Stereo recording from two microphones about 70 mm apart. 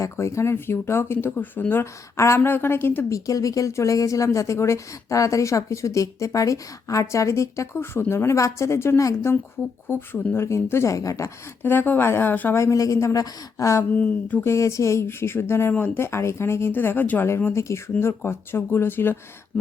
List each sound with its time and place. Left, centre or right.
0.0 s speech: left
1.8 s speech: left
3.1 s speech: left
7.8 s speech: left
11.6 s speech: left
12.5 s speech: left
13.9 s speech: left
14.4 s speech: left